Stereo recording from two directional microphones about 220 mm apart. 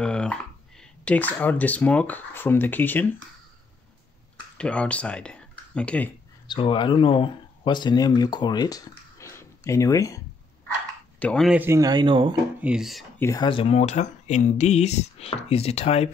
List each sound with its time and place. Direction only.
0.0 s dog: 5° left (ahead or behind)
1.0 s speech: 5° left (ahead or behind)
4.6 s speech: 5° left (ahead or behind)
6.4 s speech: 20° left (ahead or behind)
11.1 s speech: 5° left (ahead or behind); by 12.4 s 20° right (ahead or behind)
12.5 s speech: 5° right (ahead or behind)
13.2 s speech: 15° left (ahead or behind)